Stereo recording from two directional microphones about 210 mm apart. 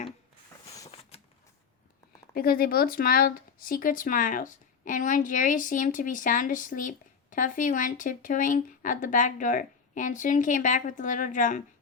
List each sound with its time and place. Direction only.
1.1 s typewriter: 30° left (ahead or behind)
2.3 s speech: 45° left (ahead or behind)